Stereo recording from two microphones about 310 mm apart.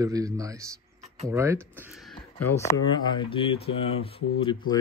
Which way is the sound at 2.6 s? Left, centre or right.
Centre.